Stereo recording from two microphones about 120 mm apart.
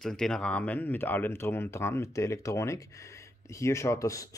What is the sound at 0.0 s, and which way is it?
Speech, 5° left (ahead or behind).